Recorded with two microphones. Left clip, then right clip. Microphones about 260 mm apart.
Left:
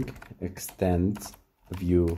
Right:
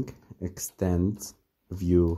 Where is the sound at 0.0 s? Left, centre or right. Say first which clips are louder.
Left 1 dB; right.